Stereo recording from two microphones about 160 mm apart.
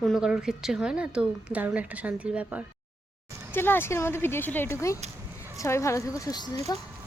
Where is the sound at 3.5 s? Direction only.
15° left (ahead or behind).